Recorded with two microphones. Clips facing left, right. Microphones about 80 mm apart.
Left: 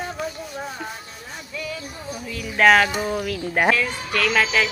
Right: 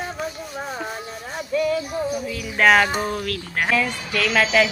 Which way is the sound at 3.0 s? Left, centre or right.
Centre.